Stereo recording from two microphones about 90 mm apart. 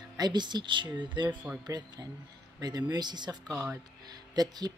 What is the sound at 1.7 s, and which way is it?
Speech, 45° right (ahead or behind).